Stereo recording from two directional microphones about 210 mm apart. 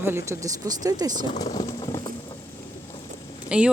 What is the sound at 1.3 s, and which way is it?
Speech, 20° left (ahead or behind).